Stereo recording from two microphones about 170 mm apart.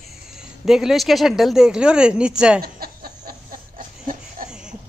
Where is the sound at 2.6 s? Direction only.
60° right (ahead or behind).